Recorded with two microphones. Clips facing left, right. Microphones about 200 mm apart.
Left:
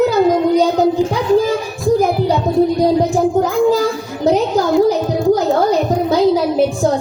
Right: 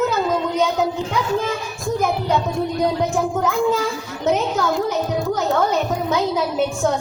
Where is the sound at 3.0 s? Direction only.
35° left (ahead or behind).